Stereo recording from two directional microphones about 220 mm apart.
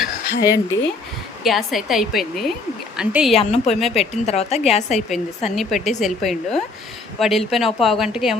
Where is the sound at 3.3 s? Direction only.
30° left (ahead or behind).